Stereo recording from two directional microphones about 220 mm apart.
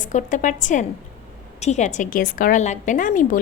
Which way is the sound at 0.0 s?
35° left (ahead or behind).